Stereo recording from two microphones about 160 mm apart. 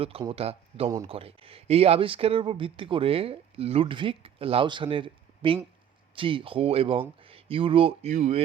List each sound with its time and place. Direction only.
0.0 s speech: 35° right (ahead or behind)